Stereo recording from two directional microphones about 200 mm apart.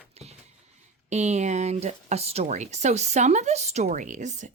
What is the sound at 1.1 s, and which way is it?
Speech, 35° right (ahead or behind).